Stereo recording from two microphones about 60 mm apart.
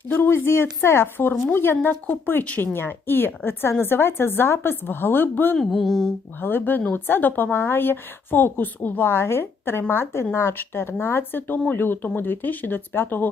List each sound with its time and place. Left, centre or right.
0.1 s a woman's voice: left
5.5 s a sound: centre
6.4 s a woman's voice: left